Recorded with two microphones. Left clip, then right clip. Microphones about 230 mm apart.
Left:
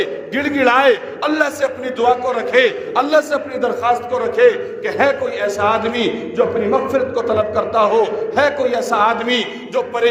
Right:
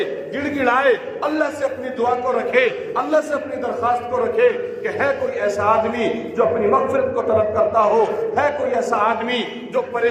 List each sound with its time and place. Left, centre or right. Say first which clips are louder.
0.0 s a man's voice: left 4 dB; left